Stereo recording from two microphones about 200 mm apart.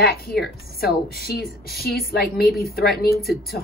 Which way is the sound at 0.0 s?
50° left (ahead or behind).